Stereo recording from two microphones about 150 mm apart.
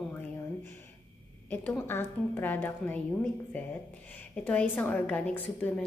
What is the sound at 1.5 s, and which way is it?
A woman's voice, 10° left (ahead or behind).